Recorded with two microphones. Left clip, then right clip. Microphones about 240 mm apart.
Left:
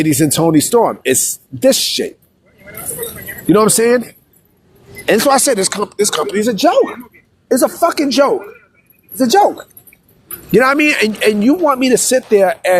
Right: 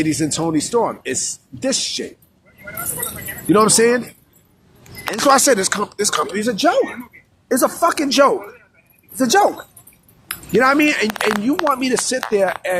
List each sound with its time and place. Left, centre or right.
0.0 s speech: left
3.4 s speech: left
5.1 s speech: left
10.5 s speech: left